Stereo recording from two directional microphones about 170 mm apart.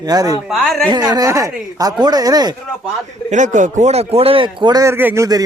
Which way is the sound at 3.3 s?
45° right (ahead or behind).